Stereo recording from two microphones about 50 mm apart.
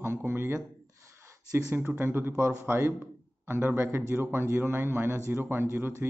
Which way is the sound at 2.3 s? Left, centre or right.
Right.